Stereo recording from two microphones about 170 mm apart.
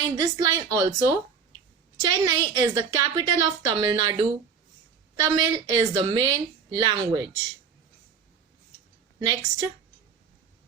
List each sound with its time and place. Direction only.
0.2 s a woman's voice: 20° right (ahead or behind)
9.1 s a woman's voice: 20° right (ahead or behind)